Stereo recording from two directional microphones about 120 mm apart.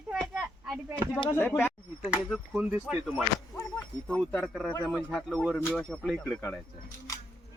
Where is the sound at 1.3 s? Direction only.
15° left (ahead or behind).